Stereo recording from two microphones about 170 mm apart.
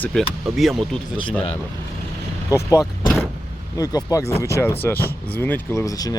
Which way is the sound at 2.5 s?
20° left (ahead or behind).